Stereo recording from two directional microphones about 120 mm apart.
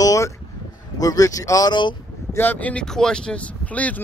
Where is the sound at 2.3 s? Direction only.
15° left (ahead or behind).